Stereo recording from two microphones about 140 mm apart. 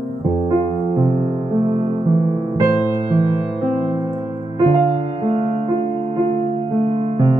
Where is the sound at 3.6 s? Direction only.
35° right (ahead or behind).